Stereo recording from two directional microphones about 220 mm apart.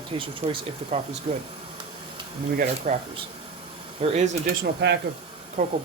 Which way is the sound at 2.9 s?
35° right (ahead or behind).